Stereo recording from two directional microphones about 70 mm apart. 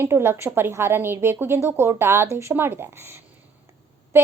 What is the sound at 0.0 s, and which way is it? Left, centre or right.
A woman's voice, right.